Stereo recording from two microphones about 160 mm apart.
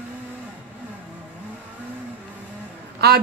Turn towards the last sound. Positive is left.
turn(degrees=-90)